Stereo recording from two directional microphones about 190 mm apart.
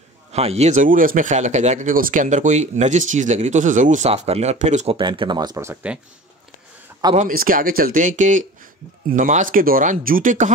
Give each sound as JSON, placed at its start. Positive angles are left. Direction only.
{"t": 0.3, "sound": "speech", "side_deg": -35}
{"t": 7.2, "sound": "speech", "side_deg": -45}